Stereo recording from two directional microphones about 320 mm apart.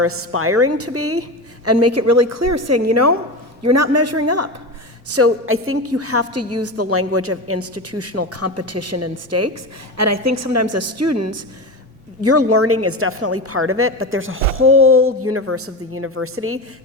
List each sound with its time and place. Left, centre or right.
0.0 s a woman's voice: right